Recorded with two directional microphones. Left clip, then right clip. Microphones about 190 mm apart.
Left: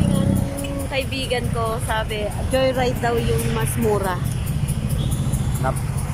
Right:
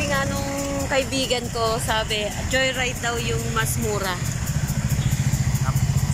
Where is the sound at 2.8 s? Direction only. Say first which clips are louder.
Left 4 dB; 35° left (ahead or behind).